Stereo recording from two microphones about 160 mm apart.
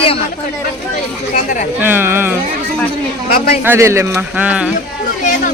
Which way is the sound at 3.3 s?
65° left (ahead or behind).